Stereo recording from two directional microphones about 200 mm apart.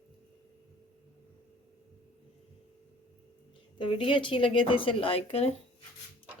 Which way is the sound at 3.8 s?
25° left (ahead or behind).